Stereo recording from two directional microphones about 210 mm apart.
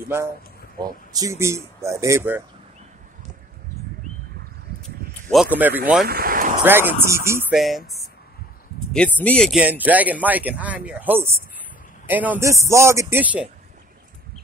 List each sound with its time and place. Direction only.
0.7 s speech: 15° right (ahead or behind)
4.8 s a sound: centre (ahead or behind)
6.0 s vehicle: 45° right (ahead or behind)
6.6 s speech: 10° right (ahead or behind)
7.5 s speech: centre (ahead or behind)
9.6 s speech: 10° right (ahead or behind)